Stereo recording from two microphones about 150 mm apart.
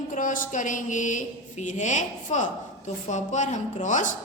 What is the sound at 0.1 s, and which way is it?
A woman's voice, 60° left (ahead or behind).